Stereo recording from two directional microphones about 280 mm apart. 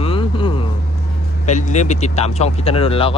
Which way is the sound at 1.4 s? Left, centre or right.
Left.